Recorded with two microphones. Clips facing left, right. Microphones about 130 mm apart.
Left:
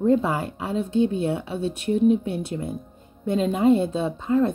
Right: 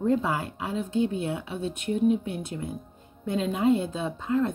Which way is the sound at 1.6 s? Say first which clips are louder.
Left 4 dB; 70° left (ahead or behind).